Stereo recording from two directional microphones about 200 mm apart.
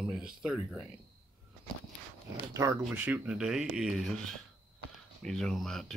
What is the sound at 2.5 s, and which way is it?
Speech, 15° right (ahead or behind).